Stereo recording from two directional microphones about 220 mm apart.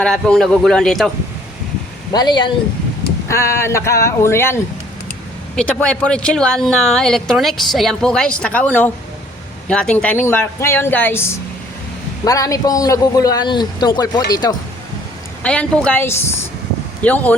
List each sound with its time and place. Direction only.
0.0 s speech: 5° left (ahead or behind)
2.1 s a man's voice: 20° left (ahead or behind)
15.4 s a man's voice: 5° left (ahead or behind)